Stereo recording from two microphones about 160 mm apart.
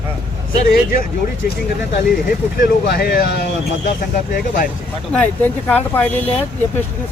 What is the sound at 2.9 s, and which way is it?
Speech, 80° left.